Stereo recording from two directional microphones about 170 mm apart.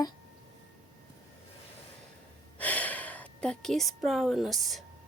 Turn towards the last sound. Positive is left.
turn(degrees=0)  # may be behind; listen again after turning